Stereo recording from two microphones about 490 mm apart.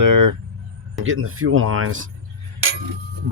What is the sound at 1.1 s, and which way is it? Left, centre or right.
Speech, right.